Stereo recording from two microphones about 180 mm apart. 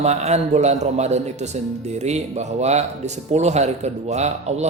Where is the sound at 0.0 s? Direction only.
35° right (ahead or behind).